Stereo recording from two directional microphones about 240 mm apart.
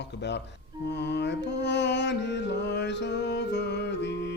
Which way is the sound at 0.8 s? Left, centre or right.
Left.